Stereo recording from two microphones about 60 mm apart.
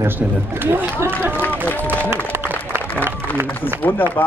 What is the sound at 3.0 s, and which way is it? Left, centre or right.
Run, right.